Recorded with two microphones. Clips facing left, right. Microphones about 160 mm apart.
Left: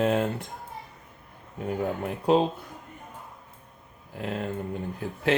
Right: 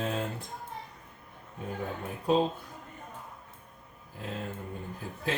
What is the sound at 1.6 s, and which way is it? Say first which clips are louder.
Speech: left 7 dB; 70° left (ahead or behind).